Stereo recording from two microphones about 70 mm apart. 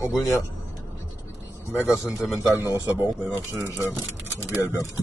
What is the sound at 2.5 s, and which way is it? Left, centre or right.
Speech, right.